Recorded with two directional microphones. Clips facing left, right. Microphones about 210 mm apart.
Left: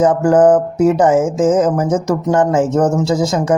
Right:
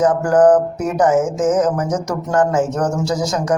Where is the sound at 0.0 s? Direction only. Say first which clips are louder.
Left 2 dB; 25° left (ahead or behind).